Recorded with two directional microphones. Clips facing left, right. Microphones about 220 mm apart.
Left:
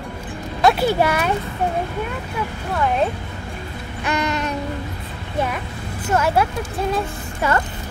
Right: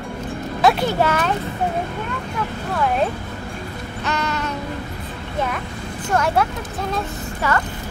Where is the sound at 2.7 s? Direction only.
Centre (ahead or behind).